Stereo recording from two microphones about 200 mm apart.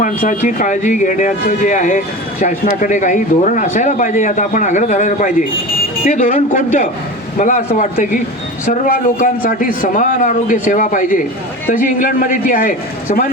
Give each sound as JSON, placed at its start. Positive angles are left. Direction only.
{"t": 0.0, "sound": "a man's voice", "side_deg": 40}